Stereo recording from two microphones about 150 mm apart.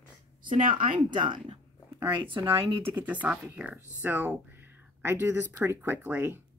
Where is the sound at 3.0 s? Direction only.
10° right (ahead or behind).